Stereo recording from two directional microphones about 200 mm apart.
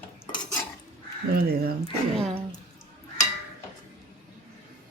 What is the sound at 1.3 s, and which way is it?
Speech, 50° right (ahead or behind).